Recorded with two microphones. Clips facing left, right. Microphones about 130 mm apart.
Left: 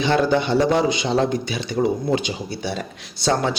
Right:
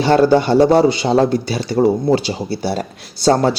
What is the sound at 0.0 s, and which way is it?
A man's voice, 35° right (ahead or behind).